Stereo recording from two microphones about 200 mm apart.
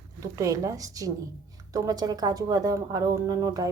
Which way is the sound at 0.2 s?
15° right (ahead or behind).